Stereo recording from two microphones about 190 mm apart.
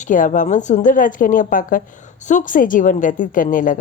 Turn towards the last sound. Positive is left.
turn(degrees=45)  # may be behind; listen again after turning